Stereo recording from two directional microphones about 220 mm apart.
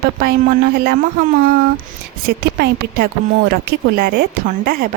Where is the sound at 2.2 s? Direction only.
45° right (ahead or behind).